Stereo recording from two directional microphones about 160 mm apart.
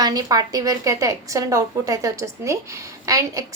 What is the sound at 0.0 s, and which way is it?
A woman's voice, 25° right (ahead or behind).